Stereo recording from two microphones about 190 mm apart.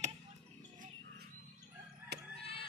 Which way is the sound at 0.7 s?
45° right (ahead or behind).